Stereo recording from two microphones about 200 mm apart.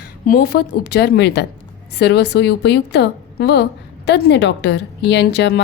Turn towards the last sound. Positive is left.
turn(degrees=60)  # may be behind; listen again after turning